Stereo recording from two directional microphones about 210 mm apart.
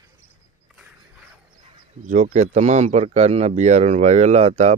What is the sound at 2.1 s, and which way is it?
Speech, 35° right (ahead or behind).